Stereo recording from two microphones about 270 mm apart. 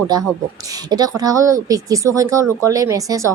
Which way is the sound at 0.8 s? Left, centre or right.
Centre.